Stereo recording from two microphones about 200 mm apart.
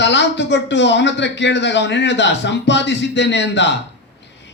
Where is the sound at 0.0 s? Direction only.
60° left (ahead or behind).